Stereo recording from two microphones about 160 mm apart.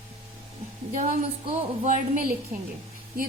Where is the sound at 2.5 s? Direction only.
50° right (ahead or behind).